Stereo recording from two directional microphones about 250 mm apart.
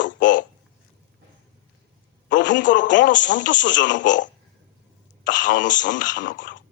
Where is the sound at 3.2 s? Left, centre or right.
Left.